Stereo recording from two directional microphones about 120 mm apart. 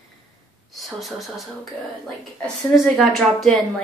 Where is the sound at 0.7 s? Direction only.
Centre (ahead or behind).